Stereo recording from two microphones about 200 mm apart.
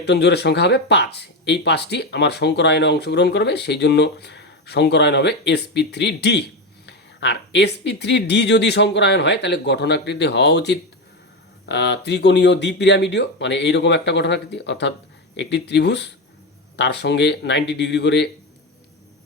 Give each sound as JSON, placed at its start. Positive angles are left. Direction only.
{"t": 0.0, "sound": "speech", "side_deg": 60}